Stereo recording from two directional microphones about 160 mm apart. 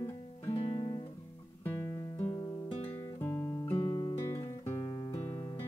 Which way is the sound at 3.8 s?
25° left (ahead or behind).